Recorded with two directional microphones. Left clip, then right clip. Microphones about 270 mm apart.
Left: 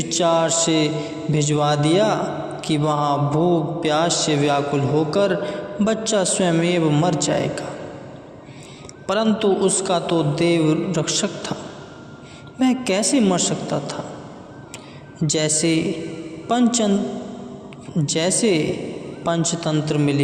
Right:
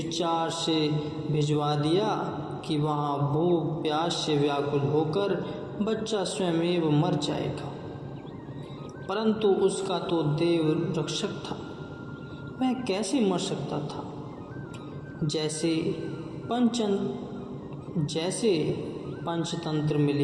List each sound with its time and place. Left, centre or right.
0.0 s a man's voice: left
9.0 s a man's voice: left
12.5 s a man's voice: left
15.3 s a man's voice: left
18.0 s a man's voice: left